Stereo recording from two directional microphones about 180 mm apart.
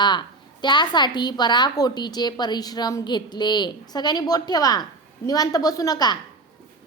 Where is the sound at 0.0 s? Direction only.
25° left (ahead or behind).